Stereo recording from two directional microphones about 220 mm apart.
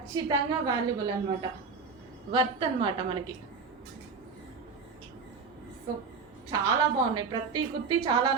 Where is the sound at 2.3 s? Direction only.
25° right (ahead or behind).